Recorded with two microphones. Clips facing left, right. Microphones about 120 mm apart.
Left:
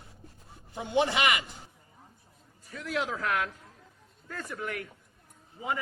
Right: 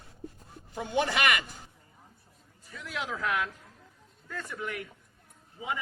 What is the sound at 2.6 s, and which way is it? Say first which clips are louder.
Speech: left 4 dB; 40° left (ahead or behind).